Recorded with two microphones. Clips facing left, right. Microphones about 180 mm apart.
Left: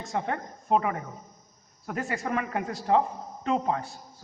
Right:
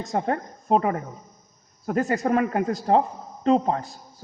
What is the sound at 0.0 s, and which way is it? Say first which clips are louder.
A man's voice: right 5 dB; 40° right (ahead or behind).